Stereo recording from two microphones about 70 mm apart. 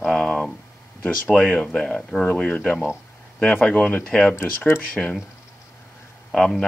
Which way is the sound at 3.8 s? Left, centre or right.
Left.